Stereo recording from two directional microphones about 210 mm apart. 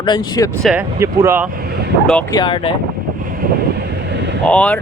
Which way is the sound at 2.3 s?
20° left (ahead or behind).